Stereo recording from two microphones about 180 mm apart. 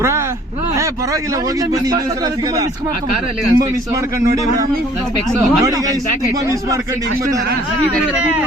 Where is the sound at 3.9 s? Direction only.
15° right (ahead or behind).